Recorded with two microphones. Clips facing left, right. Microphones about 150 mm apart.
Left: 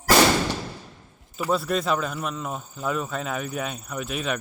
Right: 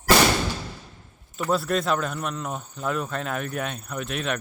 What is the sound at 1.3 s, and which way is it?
Speech, centre (ahead or behind).